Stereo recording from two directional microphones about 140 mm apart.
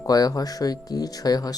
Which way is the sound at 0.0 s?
25° left (ahead or behind).